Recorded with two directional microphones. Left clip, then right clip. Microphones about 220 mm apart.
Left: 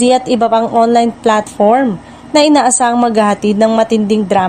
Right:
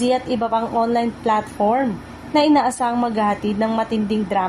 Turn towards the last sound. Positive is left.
turn(degrees=45)  # may be behind; listen again after turning